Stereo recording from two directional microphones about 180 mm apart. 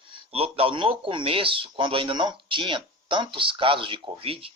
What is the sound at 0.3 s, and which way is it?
Speech, 35° right (ahead or behind).